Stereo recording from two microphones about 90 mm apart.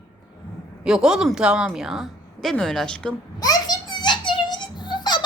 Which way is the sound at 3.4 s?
45° left (ahead or behind).